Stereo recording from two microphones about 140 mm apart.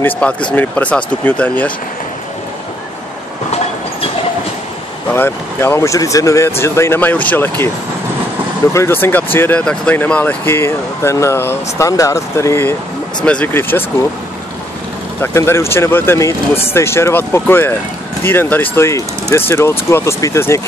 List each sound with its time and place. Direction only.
0.0 s speech: 10° left (ahead or behind)
5.1 s speech: 15° left (ahead or behind)
8.7 s speech: 15° left (ahead or behind)
13.2 s speech: 10° left (ahead or behind)
15.1 s speech: 20° left (ahead or behind)